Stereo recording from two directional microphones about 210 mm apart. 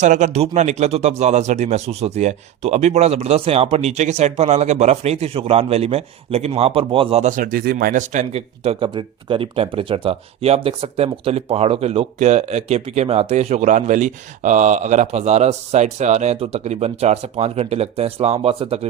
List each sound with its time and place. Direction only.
0.0 s speech: 35° right (ahead or behind)